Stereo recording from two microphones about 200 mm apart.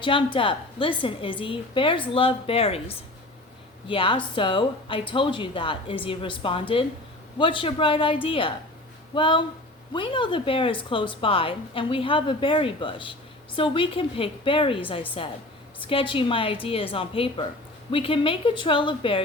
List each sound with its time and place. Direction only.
0.0 s a woman's voice: 25° left (ahead or behind)